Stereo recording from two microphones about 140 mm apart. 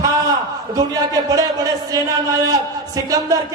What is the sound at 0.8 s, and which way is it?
Speech, 25° right (ahead or behind).